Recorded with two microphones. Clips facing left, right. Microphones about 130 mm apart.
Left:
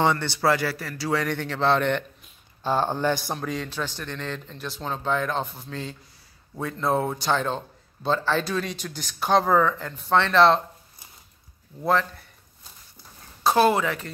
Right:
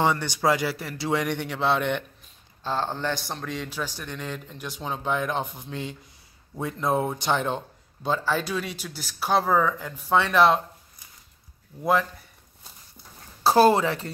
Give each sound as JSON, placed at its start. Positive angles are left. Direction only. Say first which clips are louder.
{"t": 0.0, "sound": "a man's voice", "louder": "left 1 dB", "side_deg": -10}
{"t": 2.6, "sound": "a man's voice", "louder": "left 4 dB", "side_deg": 15}
{"t": 11.8, "sound": "a man's voice", "louder": "even", "side_deg": -10}
{"t": 13.4, "sound": "speech", "louder": "right 2 dB", "side_deg": -35}